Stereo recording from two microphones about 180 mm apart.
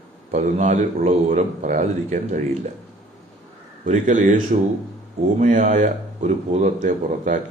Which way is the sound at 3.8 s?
45° right (ahead or behind).